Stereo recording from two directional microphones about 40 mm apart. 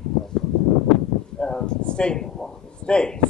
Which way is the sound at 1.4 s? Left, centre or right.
Centre.